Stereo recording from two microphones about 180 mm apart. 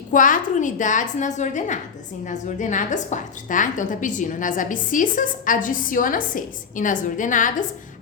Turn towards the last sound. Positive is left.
turn(degrees=45)  # may be behind; listen again after turning